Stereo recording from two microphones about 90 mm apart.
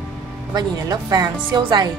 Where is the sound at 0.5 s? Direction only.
50° right (ahead or behind).